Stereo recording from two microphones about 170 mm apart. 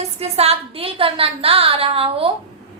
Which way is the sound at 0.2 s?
35° right (ahead or behind).